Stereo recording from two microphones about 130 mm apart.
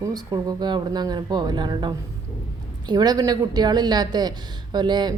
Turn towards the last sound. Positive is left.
turn(degrees=-35)  # may be behind; listen again after turning